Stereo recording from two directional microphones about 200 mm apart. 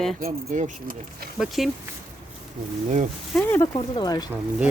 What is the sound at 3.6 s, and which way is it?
Speech, 20° left (ahead or behind).